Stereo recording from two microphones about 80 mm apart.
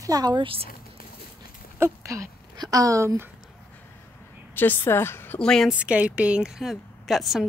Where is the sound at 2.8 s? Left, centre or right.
Right.